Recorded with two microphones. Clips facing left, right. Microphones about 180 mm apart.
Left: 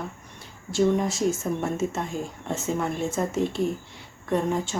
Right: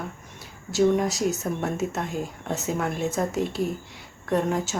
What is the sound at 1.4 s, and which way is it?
Speech, centre (ahead or behind).